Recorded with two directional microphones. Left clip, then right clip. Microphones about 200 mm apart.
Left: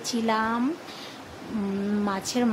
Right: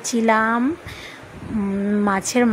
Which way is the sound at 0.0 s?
25° right (ahead or behind).